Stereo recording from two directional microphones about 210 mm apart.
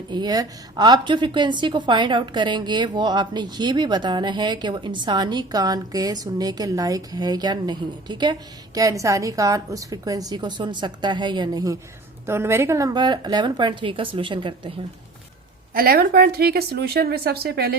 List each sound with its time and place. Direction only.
0.1 s a woman's voice: 20° right (ahead or behind)
15.7 s speech: 45° right (ahead or behind)